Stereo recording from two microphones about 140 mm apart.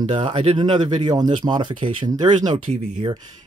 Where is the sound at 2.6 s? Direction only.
50° right (ahead or behind).